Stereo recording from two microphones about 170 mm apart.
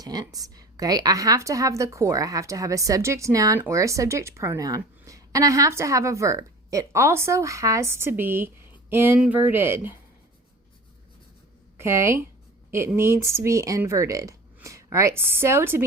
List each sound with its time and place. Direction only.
0.0 s a woman's voice: 25° right (ahead or behind)
11.8 s a woman's voice: 15° right (ahead or behind)